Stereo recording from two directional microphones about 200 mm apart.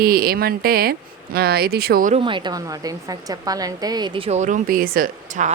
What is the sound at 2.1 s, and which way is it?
A woman's voice, 25° right (ahead or behind).